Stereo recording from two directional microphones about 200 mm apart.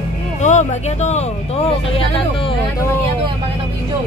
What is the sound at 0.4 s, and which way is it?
Speech, 35° left (ahead or behind).